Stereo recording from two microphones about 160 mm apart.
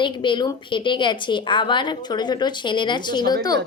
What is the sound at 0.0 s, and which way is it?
A woman's voice, 30° left (ahead or behind).